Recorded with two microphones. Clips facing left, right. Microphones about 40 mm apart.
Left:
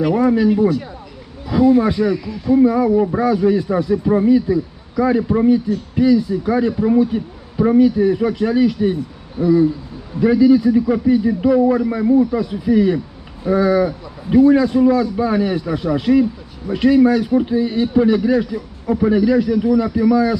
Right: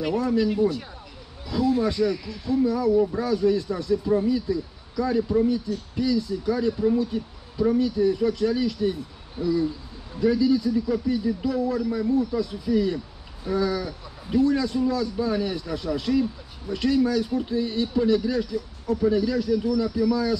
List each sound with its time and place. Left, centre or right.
0.1 s speech: left
1.5 s speech: left